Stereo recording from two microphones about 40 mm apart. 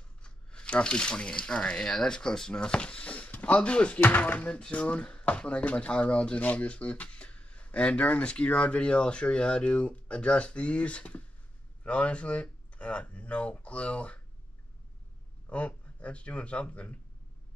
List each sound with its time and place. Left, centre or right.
0.2 s speech: left
15.5 s speech: left